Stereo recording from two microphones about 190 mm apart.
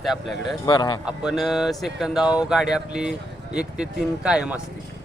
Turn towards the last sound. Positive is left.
turn(degrees=-5)  # may be behind; listen again after turning